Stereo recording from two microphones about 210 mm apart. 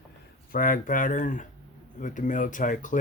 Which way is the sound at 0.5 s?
40° left (ahead or behind).